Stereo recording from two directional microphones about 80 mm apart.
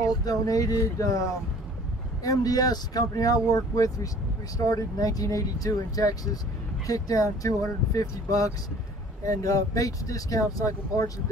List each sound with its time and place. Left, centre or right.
0.2 s speech: left
2.2 s speech: left